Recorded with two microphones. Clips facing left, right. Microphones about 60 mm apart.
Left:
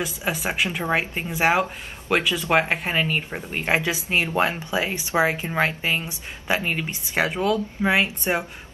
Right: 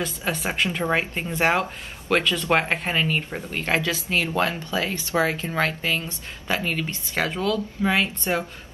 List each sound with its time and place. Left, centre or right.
0.0 s speech: centre